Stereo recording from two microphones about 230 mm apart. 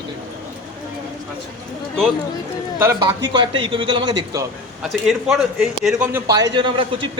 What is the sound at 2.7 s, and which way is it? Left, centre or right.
A man's voice, centre.